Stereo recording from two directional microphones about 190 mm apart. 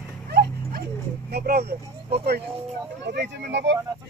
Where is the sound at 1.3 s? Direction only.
55° right (ahead or behind).